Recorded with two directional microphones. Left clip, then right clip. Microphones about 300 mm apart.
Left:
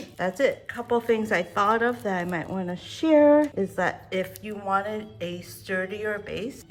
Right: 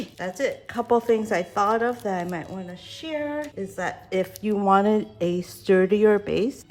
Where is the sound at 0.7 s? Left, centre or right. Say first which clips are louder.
Right 3 dB; centre.